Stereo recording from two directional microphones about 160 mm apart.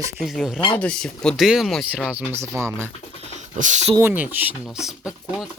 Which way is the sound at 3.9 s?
10° right (ahead or behind).